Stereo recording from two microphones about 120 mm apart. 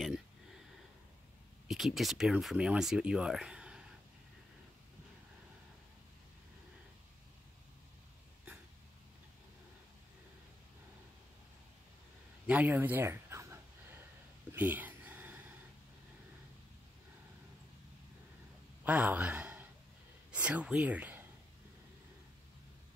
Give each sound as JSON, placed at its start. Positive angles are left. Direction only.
{"t": 1.7, "sound": "speech", "side_deg": 0}
{"t": 12.4, "sound": "a sound", "side_deg": -15}
{"t": 18.9, "sound": "a man's voice", "side_deg": -15}